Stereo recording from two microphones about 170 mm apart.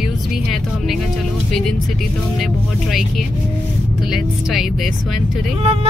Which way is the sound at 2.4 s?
Centre (ahead or behind).